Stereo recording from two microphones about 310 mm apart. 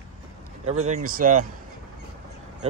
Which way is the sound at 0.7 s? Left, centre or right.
Right.